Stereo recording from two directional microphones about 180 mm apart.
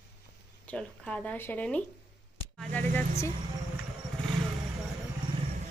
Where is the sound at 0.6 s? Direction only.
5° left (ahead or behind).